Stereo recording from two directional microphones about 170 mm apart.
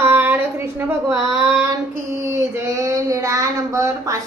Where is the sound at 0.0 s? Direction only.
10° right (ahead or behind).